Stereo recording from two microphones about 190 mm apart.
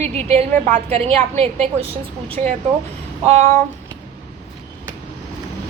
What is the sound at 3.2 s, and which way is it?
Speech, 35° right (ahead or behind).